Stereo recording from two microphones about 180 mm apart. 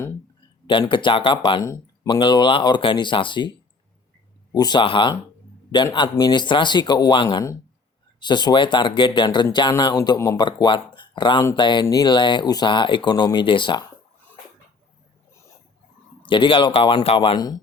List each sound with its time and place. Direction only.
0.7 s speech: 25° left (ahead or behind)
4.5 s speech: 25° left (ahead or behind)
16.2 s speech: 25° left (ahead or behind)